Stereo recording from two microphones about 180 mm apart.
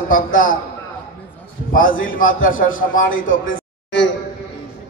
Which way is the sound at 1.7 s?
50° left (ahead or behind).